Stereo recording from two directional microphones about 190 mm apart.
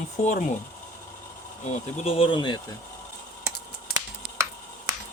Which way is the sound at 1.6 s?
35° left (ahead or behind).